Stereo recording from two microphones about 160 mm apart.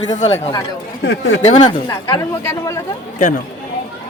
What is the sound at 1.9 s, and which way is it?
Speech, 20° left (ahead or behind).